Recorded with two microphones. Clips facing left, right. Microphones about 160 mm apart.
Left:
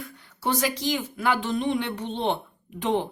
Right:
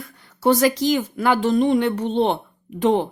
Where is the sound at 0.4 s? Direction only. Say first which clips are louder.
Right 9 dB; 40° right (ahead or behind).